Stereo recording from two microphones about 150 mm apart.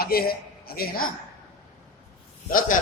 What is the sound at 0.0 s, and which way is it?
A man's voice, 90° left.